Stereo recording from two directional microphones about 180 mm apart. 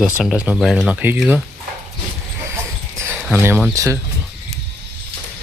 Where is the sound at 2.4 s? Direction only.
15° right (ahead or behind).